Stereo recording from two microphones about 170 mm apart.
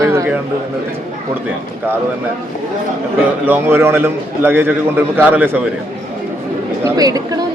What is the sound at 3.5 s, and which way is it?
A man's voice, 10° right (ahead or behind).